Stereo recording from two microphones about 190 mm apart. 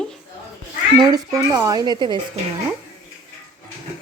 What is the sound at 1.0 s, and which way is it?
Speech, 20° right (ahead or behind).